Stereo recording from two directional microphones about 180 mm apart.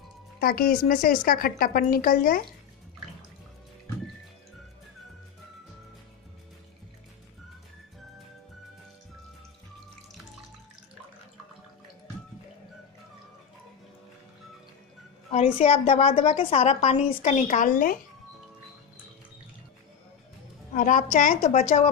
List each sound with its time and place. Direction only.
0.4 s a woman's voice: 55° left (ahead or behind)
15.3 s a woman's voice: 35° left (ahead or behind); by 17.9 s 50° left (ahead or behind)
20.7 s a woman's voice: 45° left (ahead or behind)